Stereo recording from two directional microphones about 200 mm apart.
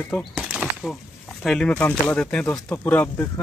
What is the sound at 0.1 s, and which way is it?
Bird flight, centre (ahead or behind).